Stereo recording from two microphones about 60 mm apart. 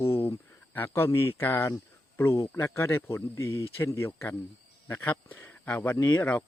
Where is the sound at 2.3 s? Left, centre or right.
Left.